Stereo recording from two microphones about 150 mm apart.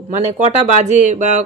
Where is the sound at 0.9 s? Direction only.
50° right (ahead or behind).